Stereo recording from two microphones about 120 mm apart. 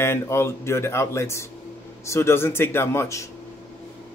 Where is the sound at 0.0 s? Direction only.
20° left (ahead or behind).